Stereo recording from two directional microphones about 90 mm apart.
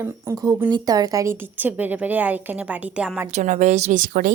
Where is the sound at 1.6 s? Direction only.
20° right (ahead or behind).